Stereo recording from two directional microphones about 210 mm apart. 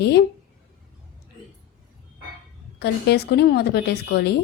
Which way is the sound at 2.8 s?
50° left (ahead or behind).